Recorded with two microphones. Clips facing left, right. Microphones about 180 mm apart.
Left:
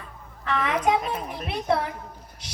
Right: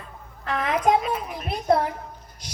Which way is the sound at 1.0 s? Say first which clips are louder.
Right 2 dB; 40° left (ahead or behind).